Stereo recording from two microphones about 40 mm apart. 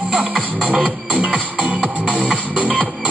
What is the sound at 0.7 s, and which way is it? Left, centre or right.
Music, right.